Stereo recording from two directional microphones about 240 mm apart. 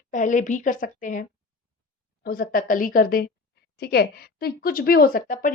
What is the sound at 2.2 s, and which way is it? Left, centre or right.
A woman's voice, left.